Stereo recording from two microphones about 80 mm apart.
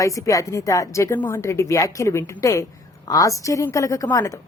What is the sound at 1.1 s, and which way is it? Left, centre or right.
Speech, left.